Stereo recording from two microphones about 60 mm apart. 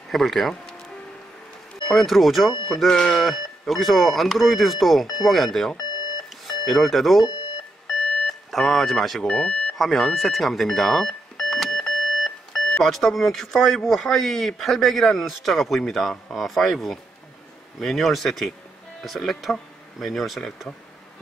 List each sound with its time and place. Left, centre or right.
0.1 s speech: centre
1.9 s speech: centre
8.3 s speech: centre
9.2 s speech: centre
9.8 s speech: centre